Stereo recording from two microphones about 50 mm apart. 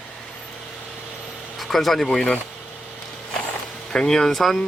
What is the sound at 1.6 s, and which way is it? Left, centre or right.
Speech, centre.